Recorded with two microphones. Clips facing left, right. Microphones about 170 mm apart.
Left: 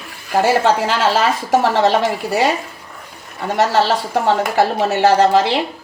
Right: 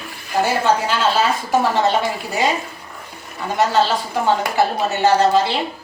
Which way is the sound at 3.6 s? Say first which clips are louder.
Left 2 dB; 75° left (ahead or behind).